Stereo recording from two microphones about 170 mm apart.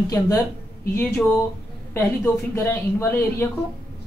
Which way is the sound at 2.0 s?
10° left (ahead or behind).